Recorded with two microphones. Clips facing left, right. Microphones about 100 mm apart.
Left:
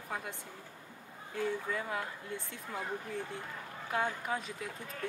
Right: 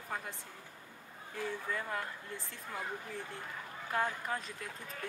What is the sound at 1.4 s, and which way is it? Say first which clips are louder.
Speech: left 3 dB; 5° left (ahead or behind).